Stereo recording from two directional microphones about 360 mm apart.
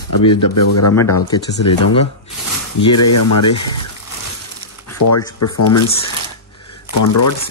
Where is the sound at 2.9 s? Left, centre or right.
Left.